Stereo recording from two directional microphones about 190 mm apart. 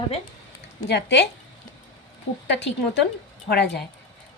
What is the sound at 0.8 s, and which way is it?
Speech, 65° left (ahead or behind).